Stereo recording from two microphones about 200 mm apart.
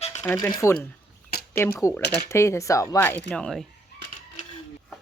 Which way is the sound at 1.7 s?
15° left (ahead or behind).